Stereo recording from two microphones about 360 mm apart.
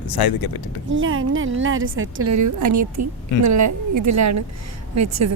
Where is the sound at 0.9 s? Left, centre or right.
Right.